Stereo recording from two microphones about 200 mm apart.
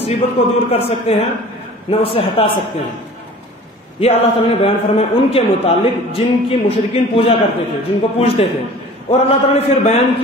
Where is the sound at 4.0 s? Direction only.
30° left (ahead or behind).